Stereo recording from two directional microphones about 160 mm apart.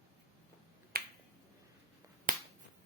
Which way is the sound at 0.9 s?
70° right (ahead or behind).